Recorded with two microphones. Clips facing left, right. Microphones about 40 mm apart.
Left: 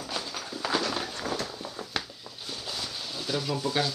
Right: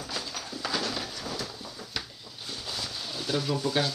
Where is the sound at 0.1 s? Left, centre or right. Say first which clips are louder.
Left 2 dB; centre.